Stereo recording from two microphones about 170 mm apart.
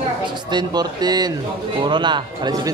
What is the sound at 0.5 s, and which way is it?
Speech, 25° right (ahead or behind).